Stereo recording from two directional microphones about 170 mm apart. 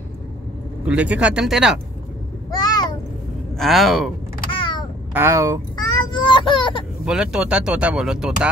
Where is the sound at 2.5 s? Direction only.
25° left (ahead or behind).